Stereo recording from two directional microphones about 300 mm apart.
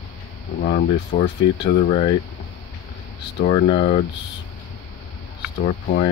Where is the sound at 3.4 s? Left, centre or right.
Left.